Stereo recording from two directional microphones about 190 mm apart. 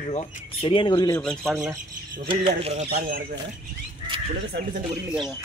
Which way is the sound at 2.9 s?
55° right (ahead or behind).